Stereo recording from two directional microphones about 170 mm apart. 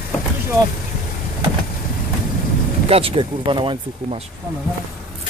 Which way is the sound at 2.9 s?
35° right (ahead or behind).